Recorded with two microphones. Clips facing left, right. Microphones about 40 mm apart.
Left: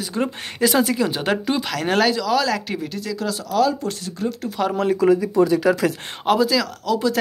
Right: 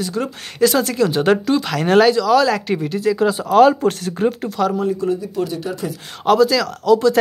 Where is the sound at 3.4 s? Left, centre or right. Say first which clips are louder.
Right 8 dB; right.